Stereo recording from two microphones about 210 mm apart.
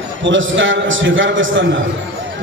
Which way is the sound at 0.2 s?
65° right (ahead or behind).